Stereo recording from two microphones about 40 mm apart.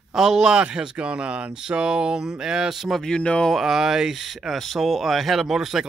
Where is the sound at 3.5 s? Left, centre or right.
Centre.